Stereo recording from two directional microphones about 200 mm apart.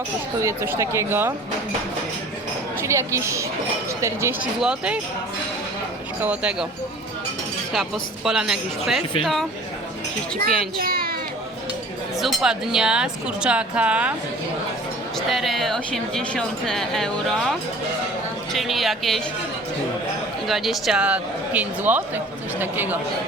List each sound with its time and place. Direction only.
0.4 s speech: 15° right (ahead or behind)
2.8 s speech: 15° right (ahead or behind)
6.2 s speech: 5° right (ahead or behind)
7.7 s speech: centre (ahead or behind)
10.8 s children playing: 45° right (ahead or behind)
12.2 s speech: centre (ahead or behind)
15.3 s speech: centre (ahead or behind)
20.5 s speech: centre (ahead or behind)